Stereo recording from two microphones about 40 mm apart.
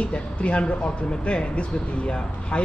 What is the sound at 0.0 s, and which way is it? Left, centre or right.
A man's voice, left.